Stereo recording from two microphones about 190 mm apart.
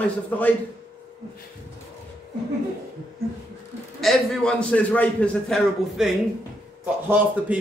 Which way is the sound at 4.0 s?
5° left (ahead or behind).